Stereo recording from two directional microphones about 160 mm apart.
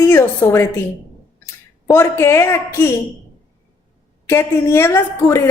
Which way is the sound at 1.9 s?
15° left (ahead or behind).